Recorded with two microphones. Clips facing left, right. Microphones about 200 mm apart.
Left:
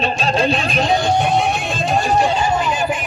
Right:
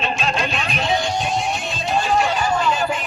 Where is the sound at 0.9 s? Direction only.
60° left (ahead or behind).